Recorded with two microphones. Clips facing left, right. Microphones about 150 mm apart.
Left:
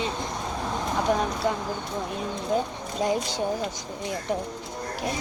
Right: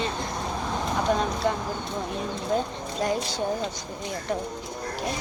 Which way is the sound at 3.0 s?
15° left (ahead or behind).